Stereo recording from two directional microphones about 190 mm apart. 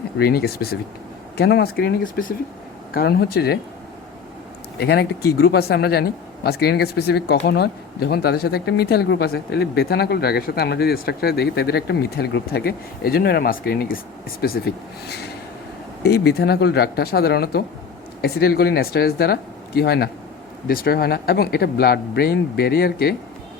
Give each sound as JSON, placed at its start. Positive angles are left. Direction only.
{"t": 0.2, "sound": "speech", "side_deg": 55}
{"t": 4.8, "sound": "speech", "side_deg": 60}